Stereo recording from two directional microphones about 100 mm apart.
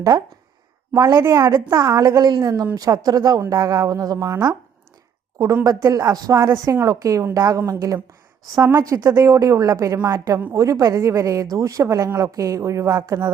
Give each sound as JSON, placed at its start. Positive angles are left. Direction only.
{"t": 0.1, "sound": "speech", "side_deg": -45}
{"t": 1.1, "sound": "a woman's voice", "side_deg": -25}
{"t": 5.6, "sound": "speech", "side_deg": -35}